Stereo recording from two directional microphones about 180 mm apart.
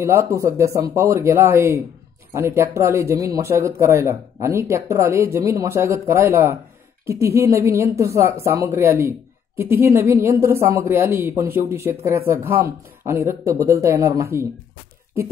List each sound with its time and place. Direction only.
0.0 s a woman's voice: 15° right (ahead or behind)